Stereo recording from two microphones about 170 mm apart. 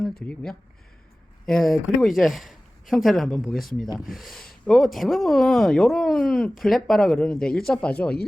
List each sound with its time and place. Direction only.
0.0 s speech: centre (ahead or behind)